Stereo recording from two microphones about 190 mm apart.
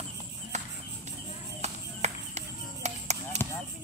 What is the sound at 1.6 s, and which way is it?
Chop, 35° right (ahead or behind).